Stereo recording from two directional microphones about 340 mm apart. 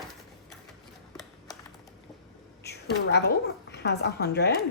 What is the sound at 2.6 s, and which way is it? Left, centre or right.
A woman's voice, left.